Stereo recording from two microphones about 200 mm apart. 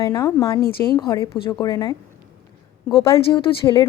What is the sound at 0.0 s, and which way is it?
Speech, 15° left (ahead or behind).